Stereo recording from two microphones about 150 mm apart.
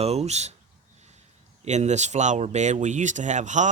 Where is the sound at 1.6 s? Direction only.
50° right (ahead or behind).